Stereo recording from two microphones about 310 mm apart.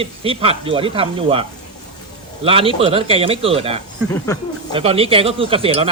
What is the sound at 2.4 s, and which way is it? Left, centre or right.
Speech, centre.